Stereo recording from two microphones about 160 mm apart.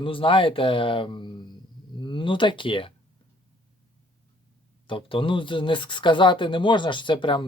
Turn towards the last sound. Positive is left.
turn(degrees=30)  # may be behind; listen again after turning